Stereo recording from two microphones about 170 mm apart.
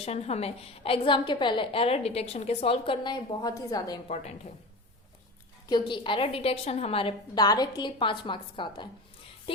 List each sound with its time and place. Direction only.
0.0 s a woman's voice: 40° left (ahead or behind); by 4.0 s 20° left (ahead or behind)
4.1 s a woman's voice: 40° left (ahead or behind)
5.6 s a woman's voice: 25° left (ahead or behind)